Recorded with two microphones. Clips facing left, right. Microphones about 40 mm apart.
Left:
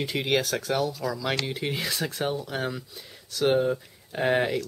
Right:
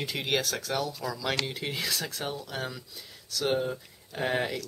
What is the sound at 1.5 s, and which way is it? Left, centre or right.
Speech, centre.